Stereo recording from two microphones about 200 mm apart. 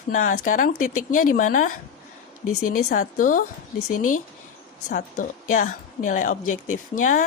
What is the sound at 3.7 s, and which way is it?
Speech, 90° left.